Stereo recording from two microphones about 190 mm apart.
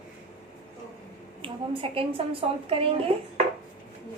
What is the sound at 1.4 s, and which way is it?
A woman's voice, 30° right (ahead or behind).